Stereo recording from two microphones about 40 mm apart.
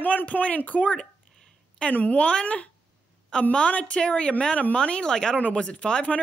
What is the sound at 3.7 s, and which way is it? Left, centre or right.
A woman's voice, left.